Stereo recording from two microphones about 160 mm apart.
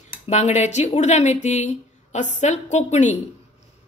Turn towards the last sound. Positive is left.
turn(degrees=50)  # may be behind; listen again after turning